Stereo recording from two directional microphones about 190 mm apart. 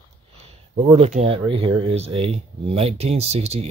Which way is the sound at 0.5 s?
30° right (ahead or behind).